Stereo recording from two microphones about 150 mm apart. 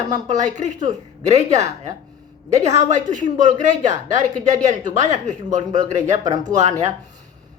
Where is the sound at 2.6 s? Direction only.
55° right (ahead or behind).